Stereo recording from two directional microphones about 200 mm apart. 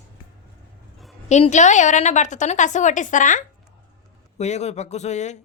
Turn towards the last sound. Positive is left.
turn(degrees=35)  # may be behind; listen again after turning